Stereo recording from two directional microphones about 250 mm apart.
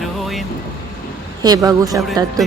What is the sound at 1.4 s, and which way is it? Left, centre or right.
Speech, centre.